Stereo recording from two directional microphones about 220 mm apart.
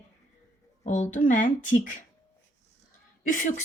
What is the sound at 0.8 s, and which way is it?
Speech, 35° left (ahead or behind).